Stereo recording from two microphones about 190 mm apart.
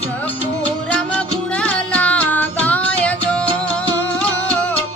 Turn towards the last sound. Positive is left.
turn(degrees=5)  # may be behind; listen again after turning